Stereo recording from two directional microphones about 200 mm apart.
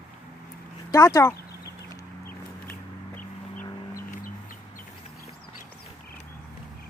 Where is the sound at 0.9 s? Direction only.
15° left (ahead or behind).